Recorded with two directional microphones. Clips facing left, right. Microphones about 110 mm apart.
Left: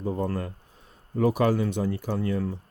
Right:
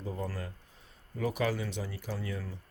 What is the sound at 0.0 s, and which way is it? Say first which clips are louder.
Speech: left 9 dB; 60° left (ahead or behind).